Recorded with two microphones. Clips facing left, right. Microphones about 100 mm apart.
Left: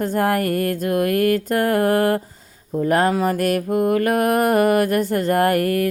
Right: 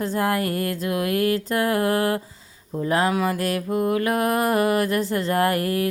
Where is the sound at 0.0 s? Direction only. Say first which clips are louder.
Left 3 dB; 50° left (ahead or behind).